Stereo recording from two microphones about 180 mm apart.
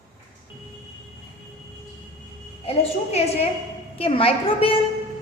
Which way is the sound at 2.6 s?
35° left (ahead or behind).